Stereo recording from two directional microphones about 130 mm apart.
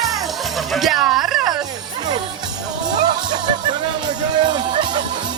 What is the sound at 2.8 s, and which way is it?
Music, 35° right (ahead or behind).